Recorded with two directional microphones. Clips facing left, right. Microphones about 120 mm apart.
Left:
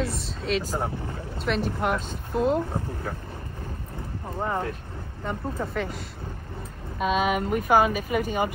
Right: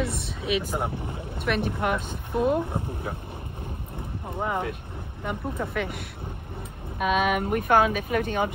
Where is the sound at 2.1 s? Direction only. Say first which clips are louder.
Even; 60° right (ahead or behind).